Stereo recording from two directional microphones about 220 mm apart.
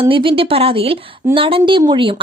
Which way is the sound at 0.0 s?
25° right (ahead or behind).